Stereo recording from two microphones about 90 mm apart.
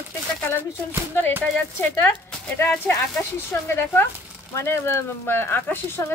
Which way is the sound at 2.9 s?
25° left (ahead or behind).